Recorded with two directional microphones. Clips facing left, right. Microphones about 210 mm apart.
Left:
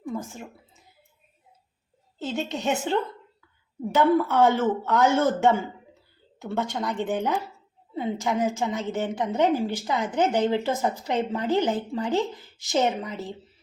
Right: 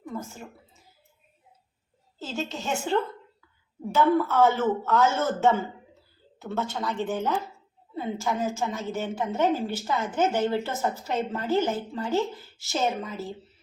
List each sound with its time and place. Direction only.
0.1 s a woman's voice: 15° left (ahead or behind)
2.3 s a woman's voice: 15° left (ahead or behind)